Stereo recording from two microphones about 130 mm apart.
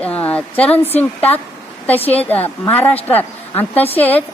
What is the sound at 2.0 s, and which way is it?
Speech, 50° left (ahead or behind).